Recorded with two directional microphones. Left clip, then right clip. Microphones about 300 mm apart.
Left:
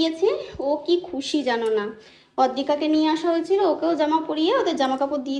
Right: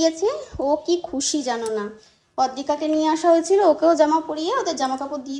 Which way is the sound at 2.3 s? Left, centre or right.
Centre.